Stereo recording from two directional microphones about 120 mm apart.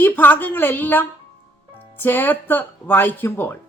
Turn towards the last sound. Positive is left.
turn(degrees=15)  # may be behind; listen again after turning